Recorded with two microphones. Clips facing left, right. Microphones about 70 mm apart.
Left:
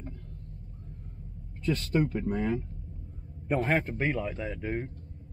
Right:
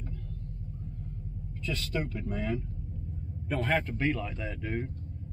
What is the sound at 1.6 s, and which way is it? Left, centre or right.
Speech, left.